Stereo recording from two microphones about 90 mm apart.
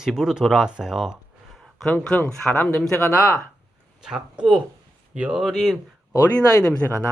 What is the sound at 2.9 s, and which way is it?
Speech, 35° left (ahead or behind).